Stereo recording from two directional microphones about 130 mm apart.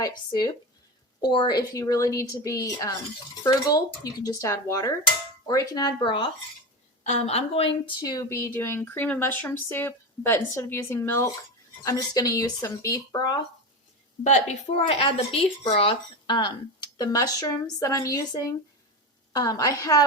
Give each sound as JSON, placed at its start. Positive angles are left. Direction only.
{"t": 0.0, "sound": "a woman's voice", "side_deg": 35}
{"t": 7.0, "sound": "a woman's voice", "side_deg": 60}
{"t": 14.3, "sound": "a woman's voice", "side_deg": 55}